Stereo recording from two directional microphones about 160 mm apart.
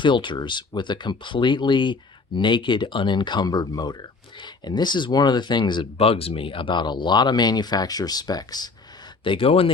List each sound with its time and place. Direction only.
0.0 s speech: 30° left (ahead or behind)